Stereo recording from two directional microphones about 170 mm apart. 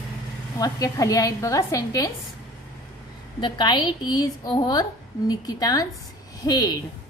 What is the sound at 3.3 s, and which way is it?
A woman's voice, 25° left (ahead or behind).